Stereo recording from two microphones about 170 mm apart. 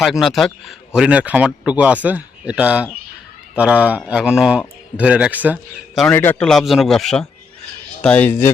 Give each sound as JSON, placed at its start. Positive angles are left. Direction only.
{"t": 0.0, "sound": "a man's voice", "side_deg": 0}
{"t": 6.1, "sound": "speech", "side_deg": 10}
{"t": 6.5, "sound": "speech", "side_deg": 0}